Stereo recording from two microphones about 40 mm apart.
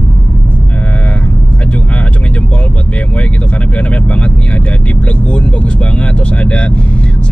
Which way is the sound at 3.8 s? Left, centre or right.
Left.